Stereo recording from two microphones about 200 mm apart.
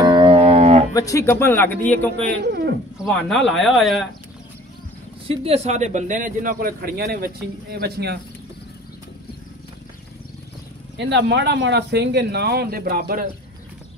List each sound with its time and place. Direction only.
0.0 s a sound: 25° right (ahead or behind)
0.9 s speech: 15° left (ahead or behind)
2.3 s speech: 55° right (ahead or behind)
3.0 s speech: centre (ahead or behind)
5.3 s a man's voice: 30° right (ahead or behind); by 8.2 s 55° right (ahead or behind)
11.0 s speech: 60° right (ahead or behind)